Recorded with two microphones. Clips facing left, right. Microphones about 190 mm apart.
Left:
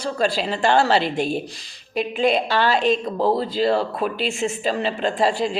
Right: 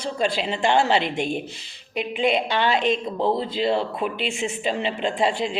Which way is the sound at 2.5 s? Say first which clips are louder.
Left 2 dB; 20° right (ahead or behind).